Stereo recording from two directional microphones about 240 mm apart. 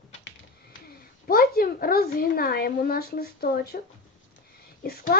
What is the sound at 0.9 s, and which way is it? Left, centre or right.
Speech, left.